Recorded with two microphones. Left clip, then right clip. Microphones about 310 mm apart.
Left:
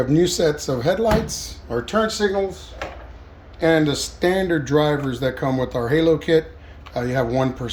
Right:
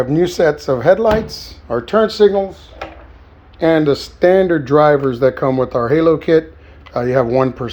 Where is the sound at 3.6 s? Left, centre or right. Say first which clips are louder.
Right 5 dB; centre.